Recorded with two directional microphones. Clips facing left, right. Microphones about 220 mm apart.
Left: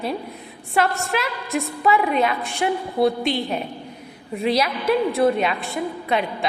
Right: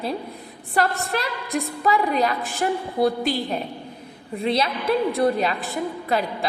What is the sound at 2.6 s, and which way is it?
Speech, 45° right (ahead or behind).